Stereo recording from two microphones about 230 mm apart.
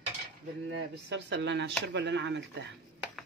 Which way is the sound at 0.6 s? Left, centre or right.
Right.